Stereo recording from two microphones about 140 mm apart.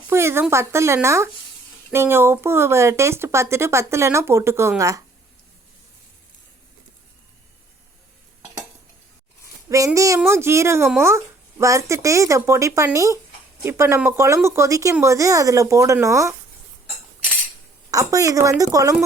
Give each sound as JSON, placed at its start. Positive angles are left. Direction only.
{"t": 0.1, "sound": "a sound", "side_deg": -20}
{"t": 0.5, "sound": "speech", "side_deg": -20}
{"t": 9.6, "sound": "speech", "side_deg": -25}
{"t": 17.9, "sound": "speech", "side_deg": -25}